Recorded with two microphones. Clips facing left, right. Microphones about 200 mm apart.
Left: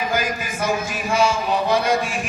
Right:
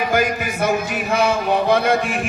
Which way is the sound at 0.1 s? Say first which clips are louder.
Right 5 dB; 60° right (ahead or behind).